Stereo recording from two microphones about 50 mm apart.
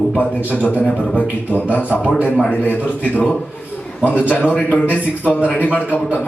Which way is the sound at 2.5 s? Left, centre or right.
Left.